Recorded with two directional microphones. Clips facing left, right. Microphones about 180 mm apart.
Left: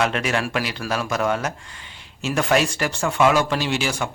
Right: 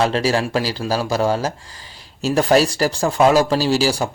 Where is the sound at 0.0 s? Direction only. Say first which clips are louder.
Right 4 dB; 30° right (ahead or behind).